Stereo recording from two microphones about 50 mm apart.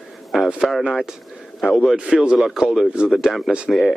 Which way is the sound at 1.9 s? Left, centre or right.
Centre.